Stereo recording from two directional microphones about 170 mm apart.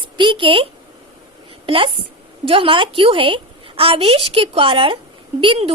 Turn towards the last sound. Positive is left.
turn(degrees=-35)  # may be behind; listen again after turning